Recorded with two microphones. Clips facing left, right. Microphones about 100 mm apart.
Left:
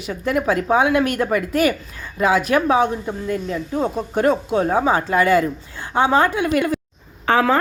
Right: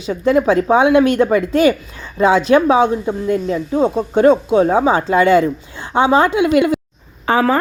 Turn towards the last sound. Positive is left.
turn(degrees=-10)  # may be behind; listen again after turning